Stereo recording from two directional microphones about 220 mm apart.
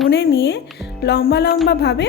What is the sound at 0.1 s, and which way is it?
Speech, 45° left (ahead or behind).